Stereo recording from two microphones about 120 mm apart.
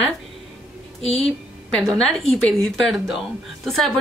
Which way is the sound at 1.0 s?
55° left (ahead or behind).